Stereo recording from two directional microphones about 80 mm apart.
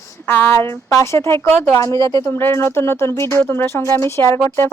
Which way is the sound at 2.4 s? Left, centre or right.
Left.